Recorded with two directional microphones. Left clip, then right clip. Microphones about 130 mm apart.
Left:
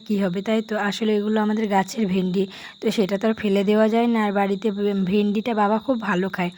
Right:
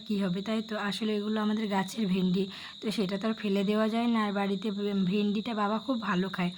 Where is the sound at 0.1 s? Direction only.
45° left (ahead or behind).